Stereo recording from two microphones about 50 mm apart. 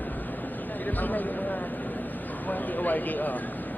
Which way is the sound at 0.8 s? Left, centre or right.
Left.